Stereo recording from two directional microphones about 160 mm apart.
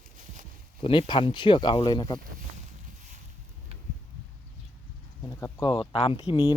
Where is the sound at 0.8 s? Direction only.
30° left (ahead or behind).